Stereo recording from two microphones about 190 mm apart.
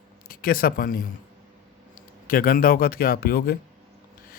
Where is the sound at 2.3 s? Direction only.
50° left (ahead or behind).